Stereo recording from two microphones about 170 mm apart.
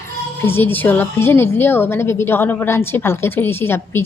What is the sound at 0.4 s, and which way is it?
A woman's voice, 10° left (ahead or behind).